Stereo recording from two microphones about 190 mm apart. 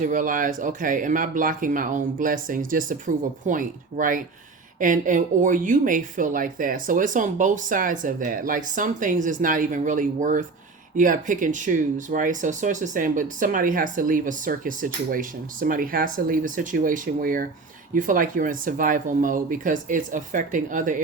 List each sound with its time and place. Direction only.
0.0 s speech: 45° right (ahead or behind)